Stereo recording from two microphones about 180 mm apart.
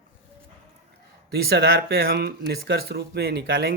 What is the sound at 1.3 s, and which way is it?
Speech, 60° right (ahead or behind).